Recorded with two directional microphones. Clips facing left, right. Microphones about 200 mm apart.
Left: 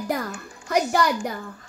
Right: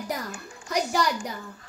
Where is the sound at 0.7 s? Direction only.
55° left (ahead or behind).